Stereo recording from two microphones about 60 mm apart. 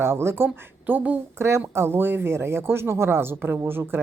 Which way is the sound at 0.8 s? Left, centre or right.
Right.